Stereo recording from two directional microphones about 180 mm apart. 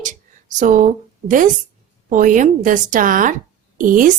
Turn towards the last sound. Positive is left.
turn(degrees=-50)  # may be behind; listen again after turning